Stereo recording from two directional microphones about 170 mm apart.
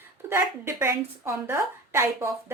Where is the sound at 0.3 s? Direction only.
15° right (ahead or behind).